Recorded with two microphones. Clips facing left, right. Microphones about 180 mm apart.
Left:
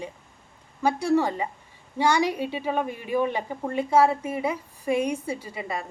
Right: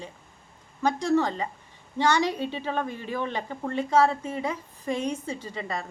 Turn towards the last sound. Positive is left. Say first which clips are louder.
# left 1 dB
turn(degrees=10)  # may be behind; listen again after turning